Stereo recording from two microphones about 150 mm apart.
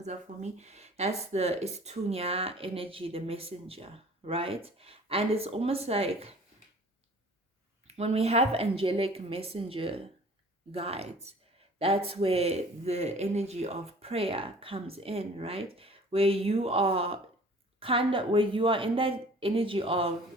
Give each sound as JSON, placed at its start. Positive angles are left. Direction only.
{"t": 0.0, "sound": "speech", "side_deg": -50}
{"t": 7.9, "sound": "speech", "side_deg": -45}